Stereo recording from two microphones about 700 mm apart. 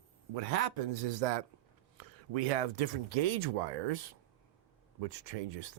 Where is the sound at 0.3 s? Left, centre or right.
Right.